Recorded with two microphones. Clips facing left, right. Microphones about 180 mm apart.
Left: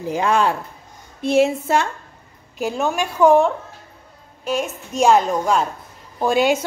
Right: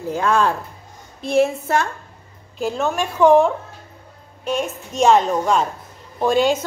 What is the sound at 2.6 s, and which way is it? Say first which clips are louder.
A woman's voice: even; 10° left (ahead or behind).